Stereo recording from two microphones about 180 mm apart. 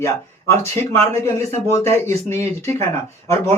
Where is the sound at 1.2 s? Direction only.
15° left (ahead or behind).